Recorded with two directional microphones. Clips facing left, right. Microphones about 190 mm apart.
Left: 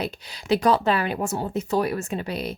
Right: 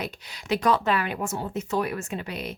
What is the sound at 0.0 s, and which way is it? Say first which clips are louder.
Speech: left 4 dB; 30° left (ahead or behind).